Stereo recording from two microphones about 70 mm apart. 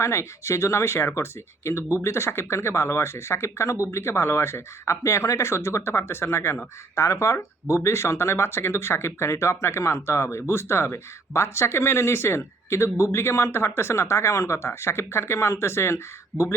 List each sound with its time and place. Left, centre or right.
0.0 s speech: left